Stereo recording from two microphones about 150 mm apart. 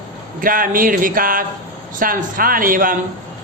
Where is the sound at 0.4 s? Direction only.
70° right (ahead or behind).